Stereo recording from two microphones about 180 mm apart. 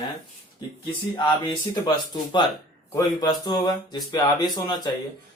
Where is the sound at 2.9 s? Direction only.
20° left (ahead or behind).